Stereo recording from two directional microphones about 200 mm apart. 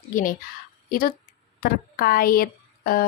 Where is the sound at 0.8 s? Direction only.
45° left (ahead or behind).